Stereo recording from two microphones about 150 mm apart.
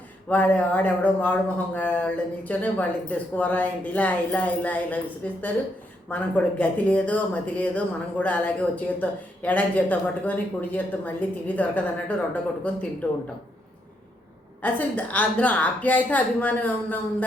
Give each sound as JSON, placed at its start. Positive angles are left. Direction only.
{"t": 0.3, "sound": "speech", "side_deg": 10}
{"t": 14.6, "sound": "speech", "side_deg": 10}